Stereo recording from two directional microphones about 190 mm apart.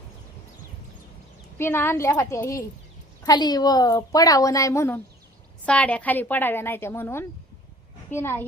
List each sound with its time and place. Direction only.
1.5 s a woman's voice: 10° left (ahead or behind)